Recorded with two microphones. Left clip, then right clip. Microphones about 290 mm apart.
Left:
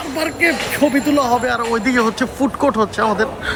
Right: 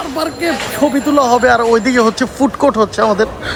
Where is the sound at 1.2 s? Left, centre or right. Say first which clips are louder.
Right 10 dB; right.